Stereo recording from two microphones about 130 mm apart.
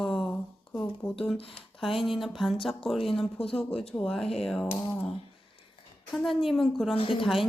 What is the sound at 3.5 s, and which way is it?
Speech, 10° left (ahead or behind).